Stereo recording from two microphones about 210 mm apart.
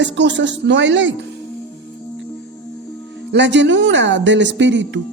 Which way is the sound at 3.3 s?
60° right (ahead or behind).